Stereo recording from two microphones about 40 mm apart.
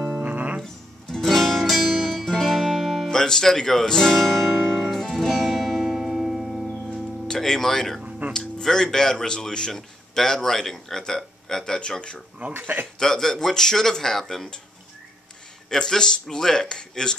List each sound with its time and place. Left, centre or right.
0.2 s music: right
1.0 s music: centre
1.3 s music: centre
3.1 s speech: centre
4.7 s music: centre
6.9 s music: centre
8.3 s speech: centre
12.5 s speech: right
13.0 s speech: centre
15.7 s speech: centre